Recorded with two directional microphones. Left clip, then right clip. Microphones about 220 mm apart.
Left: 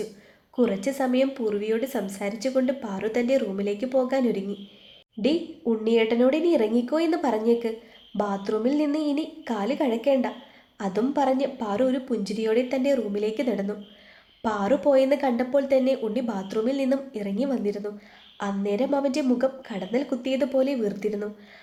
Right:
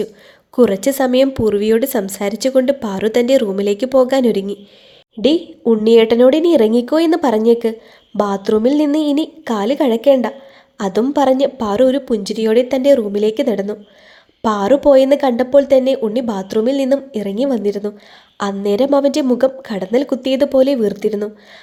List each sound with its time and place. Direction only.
0.5 s a woman's voice: 45° right (ahead or behind)